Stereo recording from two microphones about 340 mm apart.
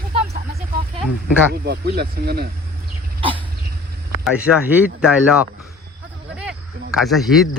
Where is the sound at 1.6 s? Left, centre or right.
Right.